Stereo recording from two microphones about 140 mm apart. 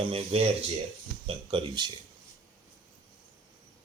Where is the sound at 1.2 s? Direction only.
35° right (ahead or behind).